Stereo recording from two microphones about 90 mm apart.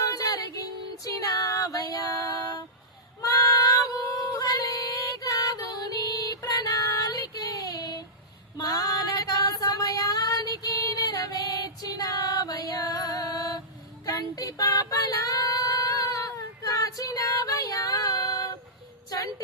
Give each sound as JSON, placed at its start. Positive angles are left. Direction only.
{"t": 0.0, "sound": "music", "side_deg": 40}
{"t": 3.2, "sound": "female singing", "side_deg": 40}